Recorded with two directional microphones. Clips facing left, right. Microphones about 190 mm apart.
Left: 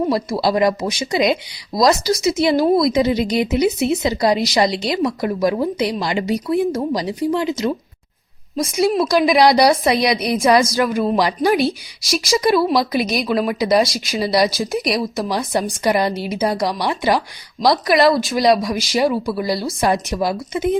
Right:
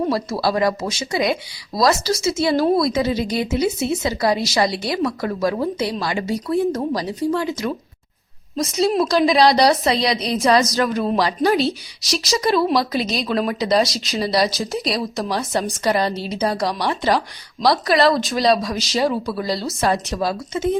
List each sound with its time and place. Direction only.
0.1 s speech: 15° left (ahead or behind)